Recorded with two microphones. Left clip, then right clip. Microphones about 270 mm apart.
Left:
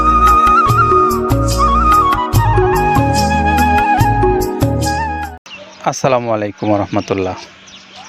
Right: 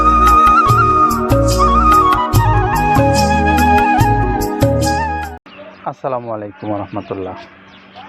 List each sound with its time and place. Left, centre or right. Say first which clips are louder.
0.0 s music: even; centre
5.8 s speech: left 7 dB; left